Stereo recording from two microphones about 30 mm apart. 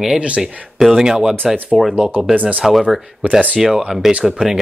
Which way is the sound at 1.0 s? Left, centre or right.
Right.